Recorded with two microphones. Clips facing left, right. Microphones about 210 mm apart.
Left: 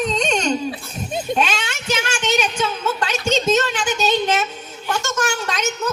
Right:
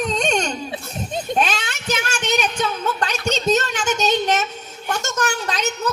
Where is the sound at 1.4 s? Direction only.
40° right (ahead or behind).